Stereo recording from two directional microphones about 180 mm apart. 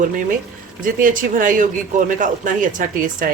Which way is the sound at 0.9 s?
50° right (ahead or behind).